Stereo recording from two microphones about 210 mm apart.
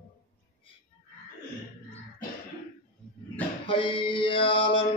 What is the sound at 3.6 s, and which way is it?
Mantra, 25° left (ahead or behind).